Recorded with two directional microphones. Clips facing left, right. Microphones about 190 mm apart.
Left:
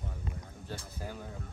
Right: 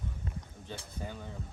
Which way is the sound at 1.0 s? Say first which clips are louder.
Right 1 dB; 5° left (ahead or behind).